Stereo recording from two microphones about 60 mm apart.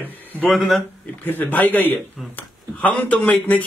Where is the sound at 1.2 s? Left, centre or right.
Left.